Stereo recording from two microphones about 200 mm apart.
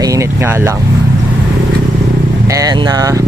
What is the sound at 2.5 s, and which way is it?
Speech, 15° right (ahead or behind).